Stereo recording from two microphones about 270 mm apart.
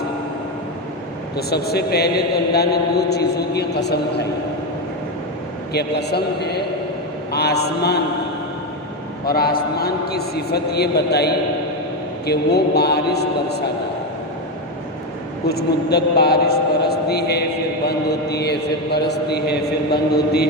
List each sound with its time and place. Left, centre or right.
1.4 s a man's voice: left
5.7 s a man's voice: left
9.2 s a man's voice: left
15.4 s a man's voice: left